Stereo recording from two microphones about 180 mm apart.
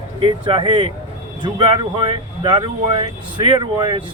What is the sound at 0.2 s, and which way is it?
Speech, 30° right (ahead or behind).